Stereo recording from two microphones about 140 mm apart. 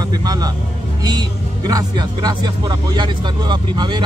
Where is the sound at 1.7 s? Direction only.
30° right (ahead or behind).